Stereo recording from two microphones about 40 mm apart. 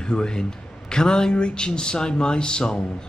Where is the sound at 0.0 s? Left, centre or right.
Left.